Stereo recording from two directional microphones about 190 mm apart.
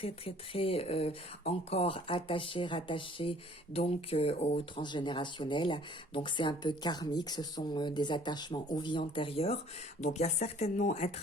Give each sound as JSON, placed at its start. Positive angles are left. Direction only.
{"t": 0.0, "sound": "speech", "side_deg": 30}